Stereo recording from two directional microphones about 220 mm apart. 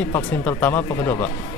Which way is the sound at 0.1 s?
10° left (ahead or behind).